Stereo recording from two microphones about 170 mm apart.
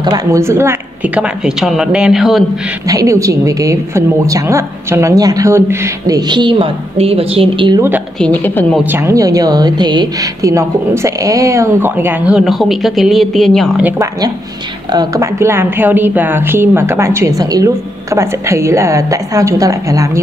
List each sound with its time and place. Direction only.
0.0 s a woman's voice: 25° right (ahead or behind); by 2.4 s centre (ahead or behind)
2.9 s a woman's voice: 20° right (ahead or behind)
8.2 s a woman's voice: 10° left (ahead or behind)
8.8 s a woman's voice: 15° right (ahead or behind); by 13.7 s centre (ahead or behind)
14.9 s a woman's voice: 20° right (ahead or behind)